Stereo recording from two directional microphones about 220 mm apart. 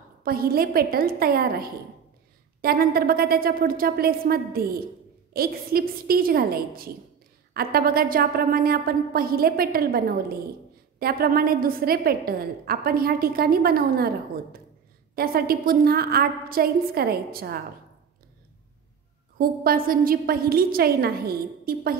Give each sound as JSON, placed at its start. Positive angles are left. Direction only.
{"t": 0.2, "sound": "a woman's voice", "side_deg": -45}
{"t": 19.3, "sound": "a woman's voice", "side_deg": -40}